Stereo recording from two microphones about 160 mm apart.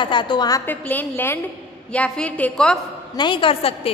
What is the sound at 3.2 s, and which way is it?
Speech, 30° left (ahead or behind).